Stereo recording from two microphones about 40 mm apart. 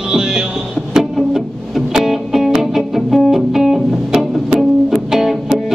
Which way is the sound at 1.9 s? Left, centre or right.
Centre.